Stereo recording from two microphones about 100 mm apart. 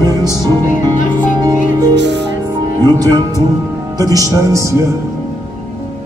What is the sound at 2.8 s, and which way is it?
Speech, 40° right (ahead or behind).